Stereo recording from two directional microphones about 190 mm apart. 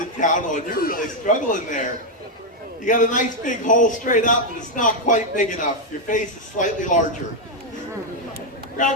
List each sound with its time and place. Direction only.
0.2 s a man's voice: 40° left (ahead or behind)